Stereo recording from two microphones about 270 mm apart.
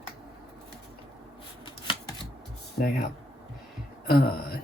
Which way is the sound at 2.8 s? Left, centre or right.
Left.